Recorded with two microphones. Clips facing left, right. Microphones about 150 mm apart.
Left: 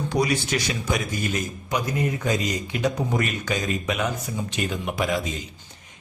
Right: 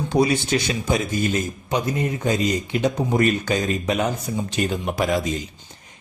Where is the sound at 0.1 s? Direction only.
25° right (ahead or behind).